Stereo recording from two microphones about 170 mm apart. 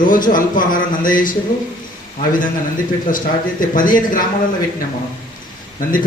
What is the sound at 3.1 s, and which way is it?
A man's voice, 50° left (ahead or behind).